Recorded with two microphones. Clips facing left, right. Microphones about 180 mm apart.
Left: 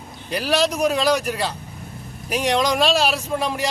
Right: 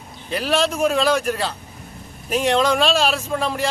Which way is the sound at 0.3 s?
10° left (ahead or behind).